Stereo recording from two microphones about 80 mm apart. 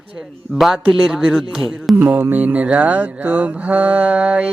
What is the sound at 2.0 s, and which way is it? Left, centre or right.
Mantra, right.